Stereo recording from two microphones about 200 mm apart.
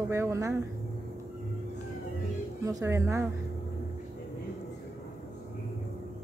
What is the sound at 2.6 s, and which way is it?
Speech, 15° right (ahead or behind).